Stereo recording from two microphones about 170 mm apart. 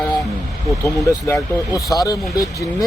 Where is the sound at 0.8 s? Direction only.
20° left (ahead or behind).